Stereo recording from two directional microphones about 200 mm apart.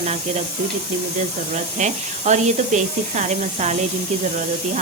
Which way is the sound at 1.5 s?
35° right (ahead or behind).